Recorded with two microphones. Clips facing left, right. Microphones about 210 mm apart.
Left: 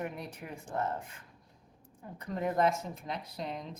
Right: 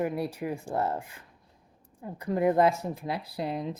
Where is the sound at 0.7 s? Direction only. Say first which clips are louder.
Right 4 dB; 35° right (ahead or behind).